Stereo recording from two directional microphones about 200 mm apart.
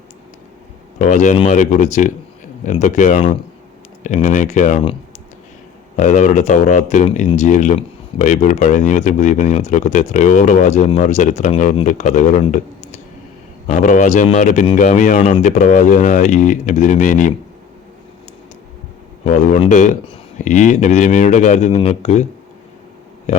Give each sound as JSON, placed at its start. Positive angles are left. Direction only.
{"t": 0.9, "sound": "speech", "side_deg": 35}
{"t": 6.0, "sound": "speech", "side_deg": 40}
{"t": 13.7, "sound": "speech", "side_deg": 40}
{"t": 19.2, "sound": "speech", "side_deg": 35}